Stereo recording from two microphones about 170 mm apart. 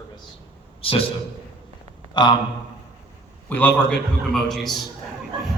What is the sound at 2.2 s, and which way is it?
Speech, 25° left (ahead or behind).